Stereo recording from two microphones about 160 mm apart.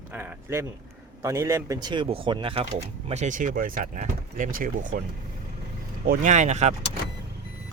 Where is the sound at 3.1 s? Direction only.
50° right (ahead or behind).